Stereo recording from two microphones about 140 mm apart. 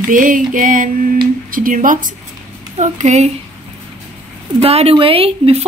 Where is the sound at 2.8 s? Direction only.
55° right (ahead or behind).